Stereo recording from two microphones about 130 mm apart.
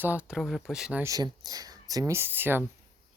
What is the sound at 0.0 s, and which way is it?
Speech, 10° right (ahead or behind).